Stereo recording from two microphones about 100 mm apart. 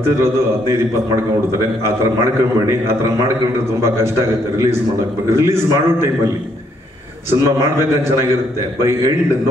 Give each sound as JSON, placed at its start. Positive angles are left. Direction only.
{"t": 0.0, "sound": "a man's voice", "side_deg": -25}
{"t": 5.3, "sound": "a man's voice", "side_deg": -25}